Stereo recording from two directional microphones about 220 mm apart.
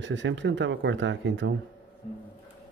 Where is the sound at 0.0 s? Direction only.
55° right (ahead or behind).